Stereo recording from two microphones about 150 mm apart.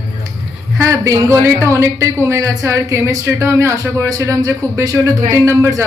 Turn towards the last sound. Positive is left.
turn(degrees=-15)  # may be behind; listen again after turning